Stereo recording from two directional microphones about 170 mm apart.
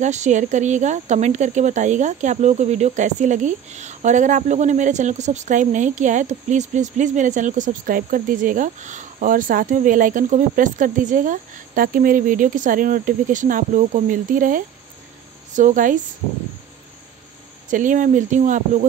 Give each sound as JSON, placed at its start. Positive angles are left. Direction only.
{"t": 0.0, "sound": "speech", "side_deg": -45}
{"t": 17.6, "sound": "speech", "side_deg": -50}